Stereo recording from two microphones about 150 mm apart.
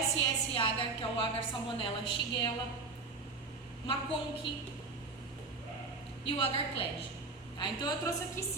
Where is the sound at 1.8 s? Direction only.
35° left (ahead or behind).